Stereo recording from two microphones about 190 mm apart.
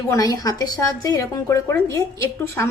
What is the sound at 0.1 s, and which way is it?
Speech, 20° left (ahead or behind).